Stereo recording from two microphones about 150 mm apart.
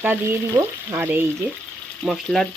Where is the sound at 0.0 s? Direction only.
15° right (ahead or behind).